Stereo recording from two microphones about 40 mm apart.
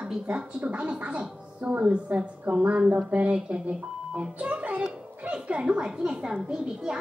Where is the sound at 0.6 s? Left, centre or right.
Right.